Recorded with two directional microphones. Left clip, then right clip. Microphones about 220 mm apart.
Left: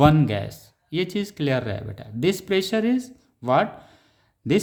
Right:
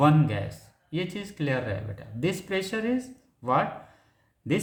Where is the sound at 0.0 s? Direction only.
50° left (ahead or behind).